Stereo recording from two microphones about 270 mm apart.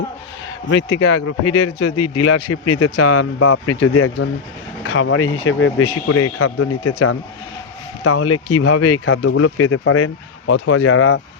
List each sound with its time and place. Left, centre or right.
0.7 s speech: left
1.8 s speech: left